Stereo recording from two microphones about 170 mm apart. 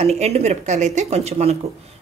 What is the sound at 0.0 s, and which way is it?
A woman's voice, 40° right (ahead or behind).